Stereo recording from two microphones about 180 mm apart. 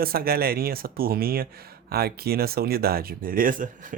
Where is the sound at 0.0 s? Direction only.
55° right (ahead or behind).